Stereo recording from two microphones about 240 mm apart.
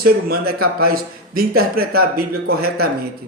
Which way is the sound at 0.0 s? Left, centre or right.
Right.